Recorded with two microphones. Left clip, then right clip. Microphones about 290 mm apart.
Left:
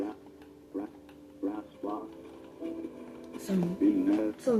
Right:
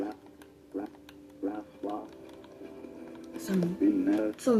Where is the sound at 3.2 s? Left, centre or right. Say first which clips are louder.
Right 2 dB; centre.